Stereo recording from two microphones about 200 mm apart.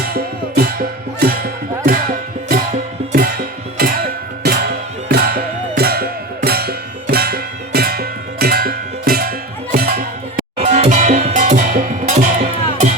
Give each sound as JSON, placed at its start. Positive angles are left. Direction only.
{"t": 0.0, "sound": "music", "side_deg": -50}
{"t": 3.0, "sound": "music", "side_deg": -30}
{"t": 3.8, "sound": "music", "side_deg": -50}
{"t": 10.6, "sound": "music", "side_deg": -35}